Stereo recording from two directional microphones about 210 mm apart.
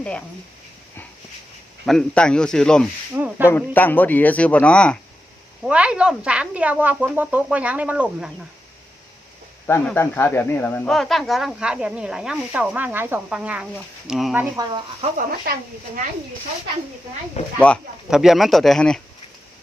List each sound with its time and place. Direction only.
0.0 s speech: 5° left (ahead or behind)
1.8 s speech: centre (ahead or behind)
3.2 s speech: 10° right (ahead or behind)
3.5 s speech: 10° left (ahead or behind)
5.6 s speech: 5° right (ahead or behind)
9.6 s speech: 10° left (ahead or behind)
14.5 s speech: 20° right (ahead or behind)
17.6 s speech: centre (ahead or behind)